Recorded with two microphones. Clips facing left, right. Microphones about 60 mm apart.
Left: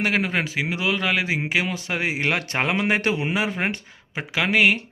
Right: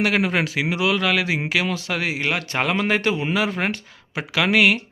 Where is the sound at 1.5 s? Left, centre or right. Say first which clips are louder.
Right 1 dB; centre.